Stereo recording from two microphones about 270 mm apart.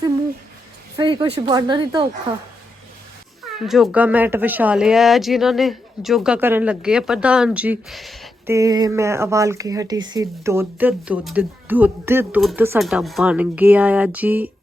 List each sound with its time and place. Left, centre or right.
0.9 s speech: centre
3.5 s speech: centre
8.5 s speech: centre